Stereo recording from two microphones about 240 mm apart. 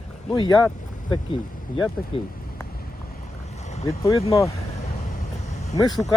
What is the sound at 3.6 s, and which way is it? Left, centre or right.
Boat, left.